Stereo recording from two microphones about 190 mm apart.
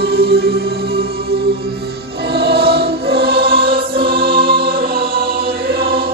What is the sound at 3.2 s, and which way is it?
Choir, 55° right (ahead or behind).